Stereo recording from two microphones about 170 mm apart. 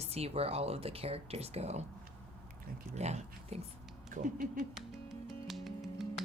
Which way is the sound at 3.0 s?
40° right (ahead or behind).